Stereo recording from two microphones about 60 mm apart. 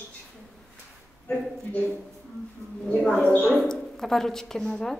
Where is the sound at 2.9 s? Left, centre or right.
Centre.